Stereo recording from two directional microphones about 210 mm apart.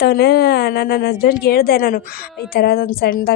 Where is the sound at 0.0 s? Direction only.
50° left (ahead or behind).